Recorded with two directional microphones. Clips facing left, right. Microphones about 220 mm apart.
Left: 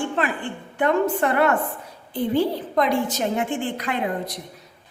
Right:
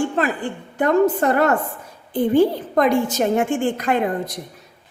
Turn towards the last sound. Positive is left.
turn(degrees=-45)  # may be behind; listen again after turning